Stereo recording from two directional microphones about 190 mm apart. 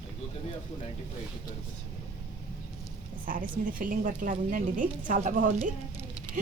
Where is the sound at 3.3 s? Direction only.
45° right (ahead or behind).